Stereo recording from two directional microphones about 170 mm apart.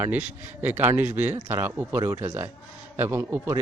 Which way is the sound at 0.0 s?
10° right (ahead or behind).